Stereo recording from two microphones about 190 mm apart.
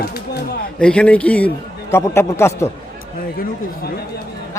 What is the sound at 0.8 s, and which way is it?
Speech, 5° left (ahead or behind).